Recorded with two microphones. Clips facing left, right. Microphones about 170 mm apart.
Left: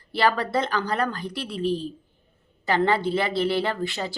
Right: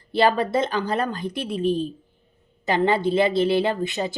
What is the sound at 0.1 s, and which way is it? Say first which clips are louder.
Speech: right 3 dB; 20° right (ahead or behind).